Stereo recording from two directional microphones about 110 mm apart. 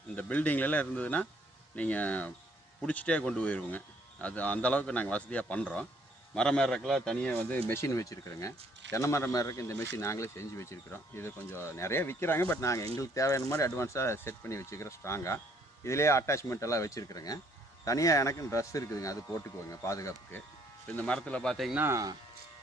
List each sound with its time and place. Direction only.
0.2 s speech: 15° left (ahead or behind)
7.7 s speech: 25° left (ahead or behind)
20.8 s speech: 10° left (ahead or behind)
21.8 s speech: 25° right (ahead or behind)